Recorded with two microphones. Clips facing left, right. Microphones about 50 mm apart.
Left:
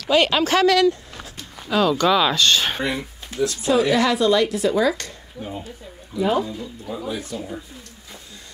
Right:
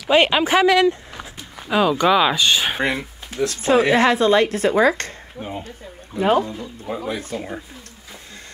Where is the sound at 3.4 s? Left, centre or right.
Right.